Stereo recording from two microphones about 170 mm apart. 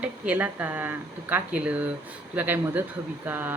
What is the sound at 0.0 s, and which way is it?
Speech, 10° right (ahead or behind).